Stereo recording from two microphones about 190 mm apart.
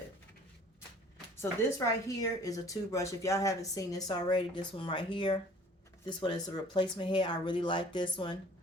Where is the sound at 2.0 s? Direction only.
20° left (ahead or behind).